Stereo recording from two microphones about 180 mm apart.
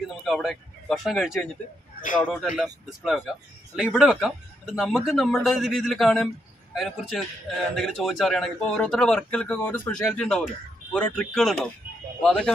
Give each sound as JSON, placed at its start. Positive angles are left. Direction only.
{"t": 0.2, "sound": "speech", "side_deg": 0}
{"t": 2.0, "sound": "a sound", "side_deg": 50}
{"t": 2.2, "sound": "speech", "side_deg": -5}